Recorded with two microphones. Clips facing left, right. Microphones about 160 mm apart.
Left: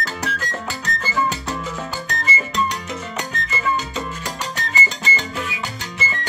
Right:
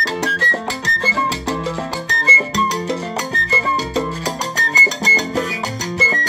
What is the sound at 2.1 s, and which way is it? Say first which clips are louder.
Music: right 4 dB; 30° right (ahead or behind).